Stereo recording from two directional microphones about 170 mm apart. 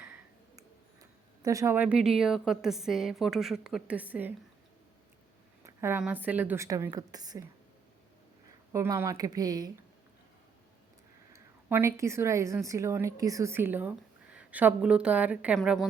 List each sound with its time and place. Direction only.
1.4 s a woman's voice: 20° right (ahead or behind)
5.6 s a woman's voice: 15° right (ahead or behind)
8.7 s speech: 15° right (ahead or behind)
11.3 s a woman's voice: 15° right (ahead or behind)